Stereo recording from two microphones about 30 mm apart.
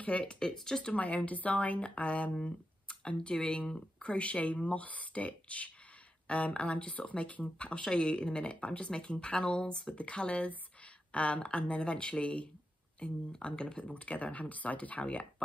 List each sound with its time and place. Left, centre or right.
0.2 s speech: left
0.9 s speech: left
2.4 s speech: left
7.4 s speech: left
9.9 s speech: left
13.8 s speech: left